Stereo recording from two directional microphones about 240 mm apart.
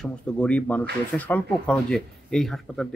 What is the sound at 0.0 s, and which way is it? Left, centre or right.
Speech, centre.